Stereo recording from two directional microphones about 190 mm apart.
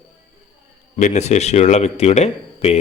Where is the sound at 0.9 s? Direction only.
40° left (ahead or behind).